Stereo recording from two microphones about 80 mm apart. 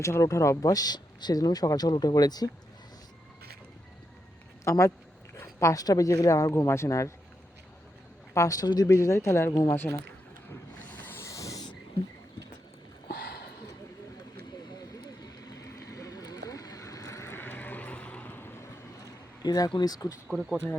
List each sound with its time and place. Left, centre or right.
0.0 s speech: left
4.6 s speech: left
8.3 s speech: left
8.9 s speech: left
9.5 s speech: left
10.8 s a sound: centre
11.2 s a sound: left
15.2 s vehicle: left
19.4 s speech: left
20.2 s speech: centre